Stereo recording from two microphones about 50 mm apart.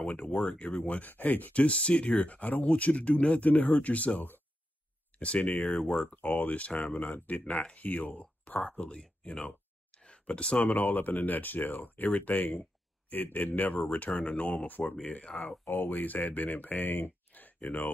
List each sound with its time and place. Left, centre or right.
0.0 s speech: left
5.8 s speech: centre
6.1 s speech: left
15.6 s speech: left